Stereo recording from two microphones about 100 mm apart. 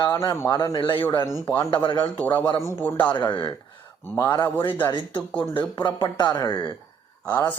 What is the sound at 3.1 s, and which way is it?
Speech, 50° left (ahead or behind).